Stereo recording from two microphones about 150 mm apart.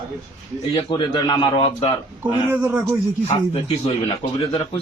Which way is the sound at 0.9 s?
35° left (ahead or behind).